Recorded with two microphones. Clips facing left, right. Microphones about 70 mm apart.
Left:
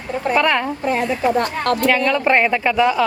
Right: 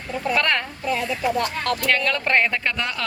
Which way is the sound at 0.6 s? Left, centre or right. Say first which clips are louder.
Left 6 dB; left.